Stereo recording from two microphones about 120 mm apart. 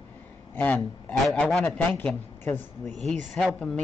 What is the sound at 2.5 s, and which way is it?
Speech, 20° left (ahead or behind).